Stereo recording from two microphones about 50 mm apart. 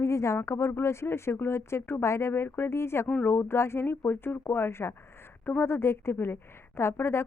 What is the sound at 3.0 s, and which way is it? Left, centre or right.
Speech, left.